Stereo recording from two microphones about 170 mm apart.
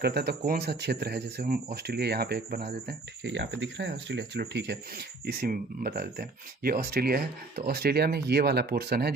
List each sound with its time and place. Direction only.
0.0 s speech: 70° right (ahead or behind)
2.6 s speech: 80° right
5.2 s speech: 65° right (ahead or behind)